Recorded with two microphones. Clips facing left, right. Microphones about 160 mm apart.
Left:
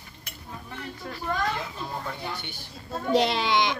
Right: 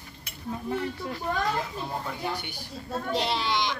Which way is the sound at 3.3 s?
55° left (ahead or behind).